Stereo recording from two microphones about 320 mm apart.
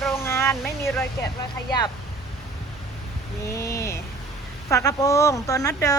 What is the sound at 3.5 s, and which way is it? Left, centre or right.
Speech, centre.